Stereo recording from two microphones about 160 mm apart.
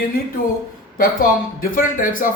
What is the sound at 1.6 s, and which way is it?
Speech, 60° left (ahead or behind).